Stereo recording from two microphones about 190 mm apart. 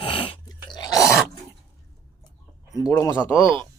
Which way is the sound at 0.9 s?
Centre (ahead or behind).